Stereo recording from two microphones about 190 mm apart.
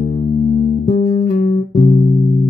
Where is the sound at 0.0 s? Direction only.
40° left (ahead or behind).